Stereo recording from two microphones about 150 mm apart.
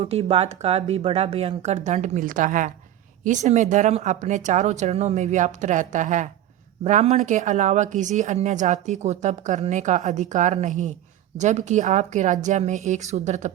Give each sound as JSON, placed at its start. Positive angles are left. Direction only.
{"t": 0.0, "sound": "a woman's voice", "side_deg": -40}